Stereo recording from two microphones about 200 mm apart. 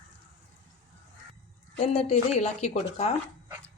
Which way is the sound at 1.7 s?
30° left (ahead or behind).